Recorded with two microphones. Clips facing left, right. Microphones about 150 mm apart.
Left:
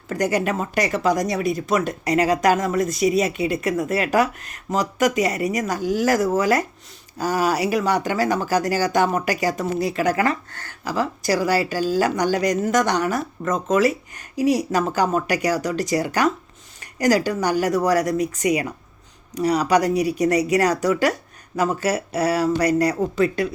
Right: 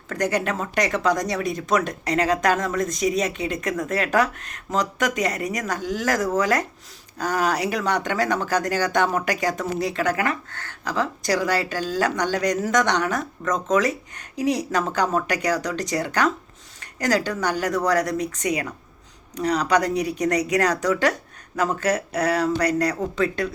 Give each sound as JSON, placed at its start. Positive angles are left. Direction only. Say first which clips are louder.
{"t": 0.1, "sound": "speech", "louder": "left 2 dB", "side_deg": 10}
{"t": 10.2, "sound": "speech", "louder": "left 4 dB", "side_deg": 35}
{"t": 10.8, "sound": "speech", "louder": "left 2 dB", "side_deg": 5}